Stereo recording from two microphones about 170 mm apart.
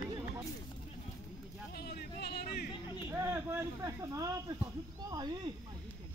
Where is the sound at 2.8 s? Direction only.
25° left (ahead or behind).